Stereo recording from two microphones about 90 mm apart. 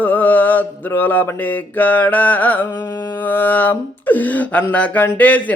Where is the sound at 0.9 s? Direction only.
20° left (ahead or behind).